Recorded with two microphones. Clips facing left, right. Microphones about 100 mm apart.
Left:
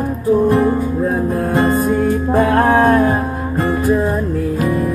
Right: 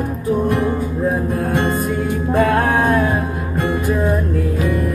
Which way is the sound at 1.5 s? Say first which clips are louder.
Left 5 dB; 35° left (ahead or behind).